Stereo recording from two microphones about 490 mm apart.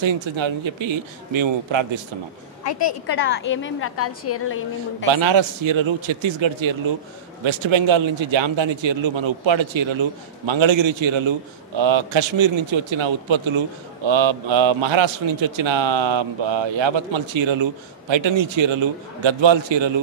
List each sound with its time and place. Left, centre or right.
0.0 s a man's voice: right
2.8 s a woman's voice: left
5.1 s a man's voice: right